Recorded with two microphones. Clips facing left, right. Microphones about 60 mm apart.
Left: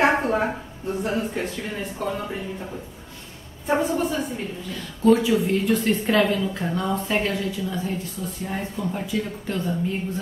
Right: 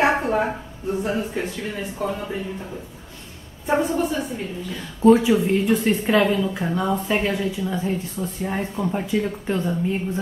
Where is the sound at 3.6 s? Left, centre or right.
Centre.